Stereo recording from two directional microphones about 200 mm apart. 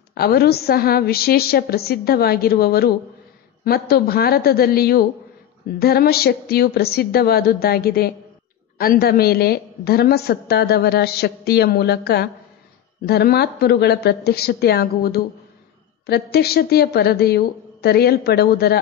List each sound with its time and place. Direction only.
0.1 s a woman's voice: 50° left (ahead or behind)